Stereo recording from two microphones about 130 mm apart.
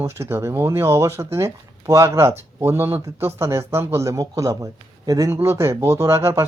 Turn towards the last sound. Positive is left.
turn(degrees=-20)  # may be behind; listen again after turning